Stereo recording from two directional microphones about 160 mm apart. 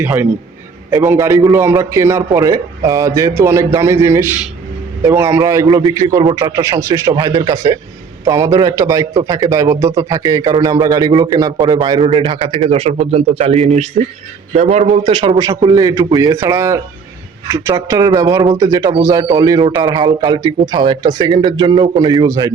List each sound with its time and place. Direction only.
0.0 s a man's voice: 15° right (ahead or behind); by 15.4 s 35° right (ahead or behind)
15.4 s a man's voice: 25° right (ahead or behind)